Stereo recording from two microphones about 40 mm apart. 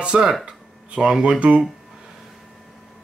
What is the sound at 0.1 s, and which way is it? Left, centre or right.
Speech, right.